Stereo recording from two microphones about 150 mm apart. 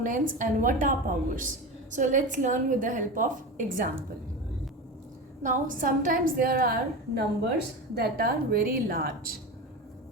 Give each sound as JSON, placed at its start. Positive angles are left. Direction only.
{"t": 0.0, "sound": "a woman's voice", "side_deg": -60}
{"t": 5.4, "sound": "a woman's voice", "side_deg": -60}
{"t": 7.9, "sound": "a woman's voice", "side_deg": -90}